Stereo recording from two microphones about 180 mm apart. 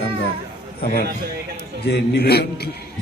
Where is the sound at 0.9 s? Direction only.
60° right (ahead or behind).